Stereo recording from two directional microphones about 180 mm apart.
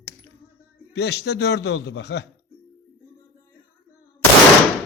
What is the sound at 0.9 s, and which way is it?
Speech, 70° left (ahead or behind).